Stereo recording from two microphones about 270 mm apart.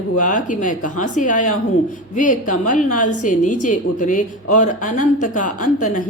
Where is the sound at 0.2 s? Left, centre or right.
Left.